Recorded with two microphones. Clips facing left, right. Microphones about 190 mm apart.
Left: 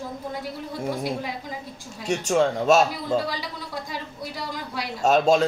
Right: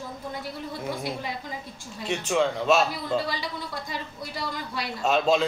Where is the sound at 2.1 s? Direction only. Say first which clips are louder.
Left 3 dB; 40° left (ahead or behind).